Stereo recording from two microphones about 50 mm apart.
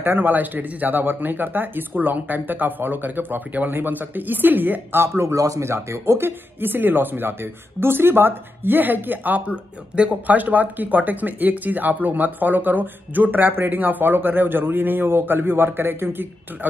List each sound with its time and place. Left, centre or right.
0.0 s speech: right
5.0 s speech: right
9.5 s speech: right